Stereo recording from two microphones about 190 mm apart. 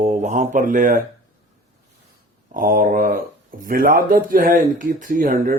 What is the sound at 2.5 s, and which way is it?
Speech, 45° right (ahead or behind).